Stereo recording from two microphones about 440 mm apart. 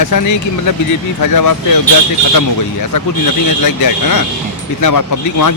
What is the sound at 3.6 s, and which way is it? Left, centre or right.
Speech, left.